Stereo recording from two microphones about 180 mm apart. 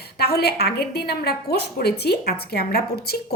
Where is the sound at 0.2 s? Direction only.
60° left (ahead or behind).